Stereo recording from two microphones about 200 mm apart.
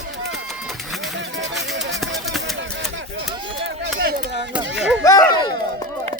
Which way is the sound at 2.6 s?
65° right (ahead or behind).